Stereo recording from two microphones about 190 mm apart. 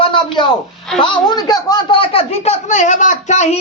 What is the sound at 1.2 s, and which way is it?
Speech, 20° left (ahead or behind).